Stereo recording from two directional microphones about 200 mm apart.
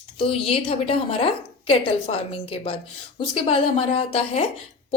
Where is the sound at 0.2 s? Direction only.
30° left (ahead or behind).